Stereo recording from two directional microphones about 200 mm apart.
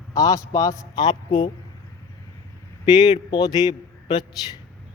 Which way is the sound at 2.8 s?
20° left (ahead or behind).